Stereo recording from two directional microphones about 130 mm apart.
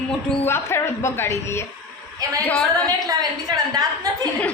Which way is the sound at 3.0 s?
25° right (ahead or behind).